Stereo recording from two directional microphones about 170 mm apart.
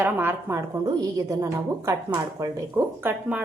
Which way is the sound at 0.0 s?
10° right (ahead or behind).